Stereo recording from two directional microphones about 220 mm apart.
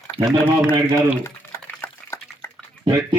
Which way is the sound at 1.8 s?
10° left (ahead or behind).